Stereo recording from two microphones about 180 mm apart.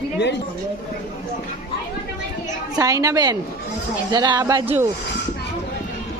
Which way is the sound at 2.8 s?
20° right (ahead or behind).